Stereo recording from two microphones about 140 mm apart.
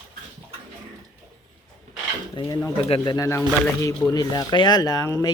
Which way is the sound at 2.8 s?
40° left (ahead or behind).